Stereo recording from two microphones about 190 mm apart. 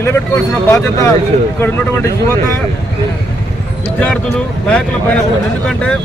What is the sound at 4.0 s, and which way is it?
Speech, 5° left (ahead or behind).